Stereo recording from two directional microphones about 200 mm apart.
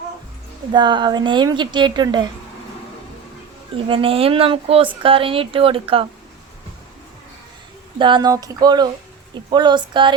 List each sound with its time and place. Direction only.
0.7 s speech: 25° right (ahead or behind)
3.8 s speech: 25° right (ahead or behind)
7.9 s speech: 25° right (ahead or behind)